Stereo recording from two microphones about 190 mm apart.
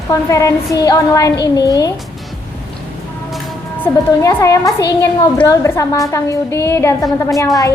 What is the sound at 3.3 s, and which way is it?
A woman's voice, 10° left (ahead or behind).